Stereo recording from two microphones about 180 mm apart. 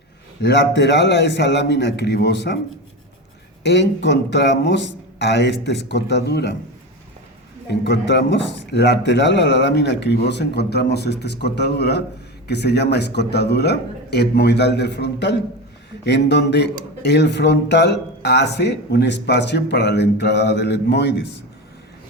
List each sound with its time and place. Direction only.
0.4 s speech: 70° left (ahead or behind)
3.6 s speech: 70° left (ahead or behind)
7.7 s speech: 70° left (ahead or behind)